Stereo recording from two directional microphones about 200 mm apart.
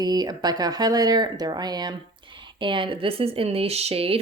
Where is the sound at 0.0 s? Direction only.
20° right (ahead or behind).